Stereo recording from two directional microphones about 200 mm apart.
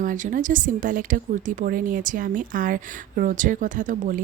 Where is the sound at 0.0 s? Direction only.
40° right (ahead or behind).